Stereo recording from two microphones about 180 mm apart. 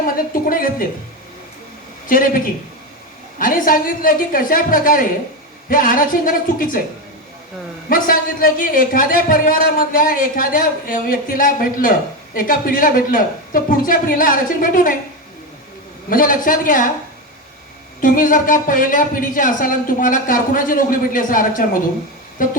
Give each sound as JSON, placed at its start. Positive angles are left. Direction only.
{"t": 0.0, "sound": "a man's voice", "side_deg": 50}
{"t": 3.3, "sound": "a man's voice", "side_deg": 50}
{"t": 7.9, "sound": "a man's voice", "side_deg": 50}
{"t": 16.0, "sound": "a man's voice", "side_deg": 50}
{"t": 18.0, "sound": "a man's voice", "side_deg": 50}